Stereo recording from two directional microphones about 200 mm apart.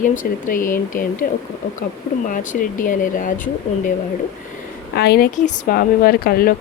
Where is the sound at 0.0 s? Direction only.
40° left (ahead or behind).